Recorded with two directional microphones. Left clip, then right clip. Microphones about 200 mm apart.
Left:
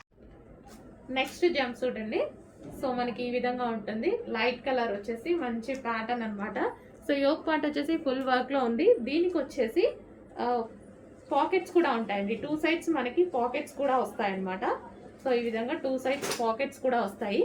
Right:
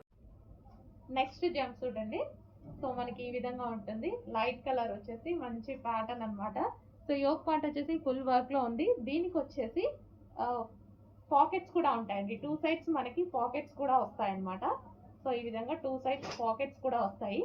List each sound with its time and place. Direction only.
1.1 s a woman's voice: 15° left (ahead or behind)